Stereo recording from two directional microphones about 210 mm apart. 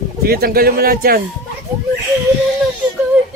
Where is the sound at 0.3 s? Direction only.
45° right (ahead or behind).